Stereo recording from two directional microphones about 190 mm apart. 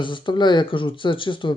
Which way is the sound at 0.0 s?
25° left (ahead or behind).